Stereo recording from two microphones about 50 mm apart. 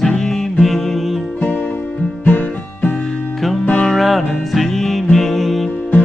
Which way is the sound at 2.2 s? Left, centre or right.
Left.